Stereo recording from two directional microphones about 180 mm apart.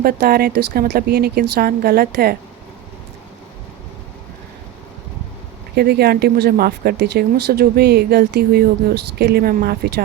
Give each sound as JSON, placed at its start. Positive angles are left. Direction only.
{"t": 0.0, "sound": "speech", "side_deg": -55}
{"t": 5.7, "sound": "speech", "side_deg": -60}